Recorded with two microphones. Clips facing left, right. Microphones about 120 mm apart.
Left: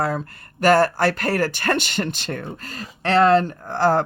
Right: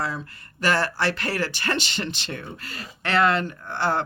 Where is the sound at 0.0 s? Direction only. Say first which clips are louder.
Left 6 dB; 50° left (ahead or behind).